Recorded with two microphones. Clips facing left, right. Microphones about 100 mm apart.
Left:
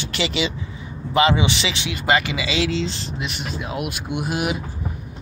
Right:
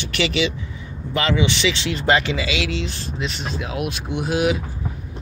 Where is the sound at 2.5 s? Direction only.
30° left (ahead or behind).